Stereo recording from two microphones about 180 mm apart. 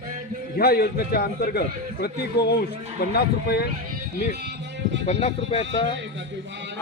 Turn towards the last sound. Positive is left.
turn(degrees=30)  # may be behind; listen again after turning